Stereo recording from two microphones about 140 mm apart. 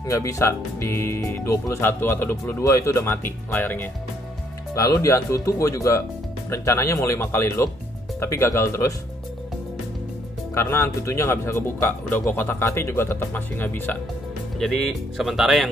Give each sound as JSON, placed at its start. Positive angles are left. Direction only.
{"t": 0.0, "sound": "speech", "side_deg": 25}
{"t": 4.7, "sound": "speech", "side_deg": 25}
{"t": 10.5, "sound": "speech", "side_deg": 20}
{"t": 14.6, "sound": "speech", "side_deg": 0}